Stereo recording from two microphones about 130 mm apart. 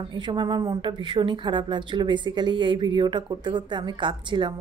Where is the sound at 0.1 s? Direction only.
35° right (ahead or behind).